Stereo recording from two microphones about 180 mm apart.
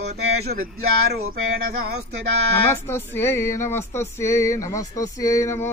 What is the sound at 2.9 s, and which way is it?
Speech, 15° left (ahead or behind).